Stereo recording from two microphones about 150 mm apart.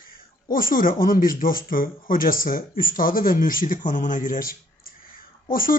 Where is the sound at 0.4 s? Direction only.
70° left (ahead or behind).